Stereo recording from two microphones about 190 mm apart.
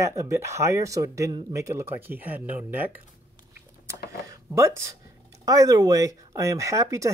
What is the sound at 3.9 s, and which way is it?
Speech, 15° right (ahead or behind).